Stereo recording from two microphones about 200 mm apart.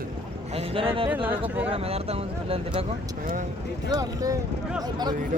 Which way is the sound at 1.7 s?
30° right (ahead or behind).